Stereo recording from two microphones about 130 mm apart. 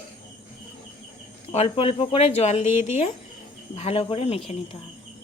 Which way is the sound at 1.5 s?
45° left (ahead or behind).